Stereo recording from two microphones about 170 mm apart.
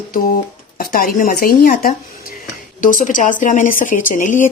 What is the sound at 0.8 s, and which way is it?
Speech, 60° left (ahead or behind).